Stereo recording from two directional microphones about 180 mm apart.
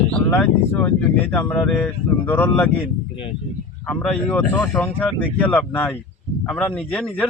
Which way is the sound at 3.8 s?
5° left (ahead or behind).